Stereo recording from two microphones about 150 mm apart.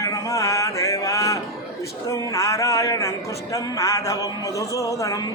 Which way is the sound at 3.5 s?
20° left (ahead or behind).